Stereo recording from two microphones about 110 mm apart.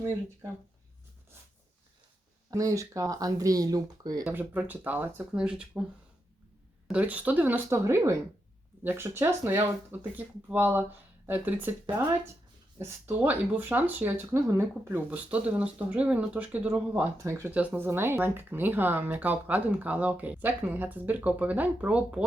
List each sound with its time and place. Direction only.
2.5 s speech: 30° right (ahead or behind)
4.3 s speech: 15° right (ahead or behind)
5.3 s speech: 5° right (ahead or behind)
6.8 s speech: 10° right (ahead or behind)
17.2 s speech: 25° right (ahead or behind)
17.5 s speech: 15° right (ahead or behind)